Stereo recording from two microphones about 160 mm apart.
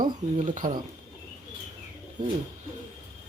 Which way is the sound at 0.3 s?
50° right (ahead or behind).